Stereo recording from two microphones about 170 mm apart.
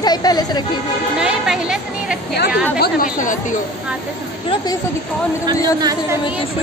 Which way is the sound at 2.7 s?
55° left (ahead or behind).